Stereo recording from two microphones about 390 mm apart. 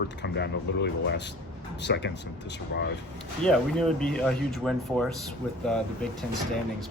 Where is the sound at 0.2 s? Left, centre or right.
Left.